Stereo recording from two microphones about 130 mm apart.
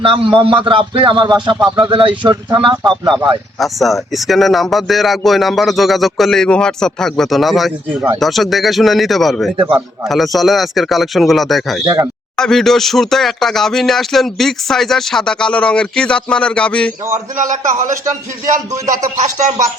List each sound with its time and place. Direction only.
0.0 s a man's voice: 40° right (ahead or behind)
3.6 s speech: centre (ahead or behind)
9.6 s a man's voice: 40° right (ahead or behind)
10.1 s speech: centre (ahead or behind)
17.3 s a man's voice: 80° right